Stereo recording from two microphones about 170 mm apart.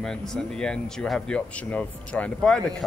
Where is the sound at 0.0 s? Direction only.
5° left (ahead or behind).